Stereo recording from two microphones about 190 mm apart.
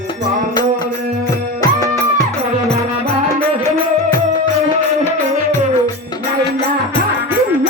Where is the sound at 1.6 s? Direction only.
20° left (ahead or behind).